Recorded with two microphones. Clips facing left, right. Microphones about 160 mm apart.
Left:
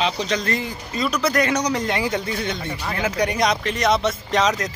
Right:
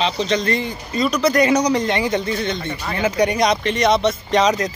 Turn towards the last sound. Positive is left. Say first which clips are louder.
# right 4 dB
turn(degrees=0)  # may be behind; listen again after turning